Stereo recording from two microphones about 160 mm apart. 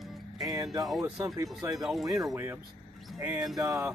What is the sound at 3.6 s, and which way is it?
Speech, 20° right (ahead or behind).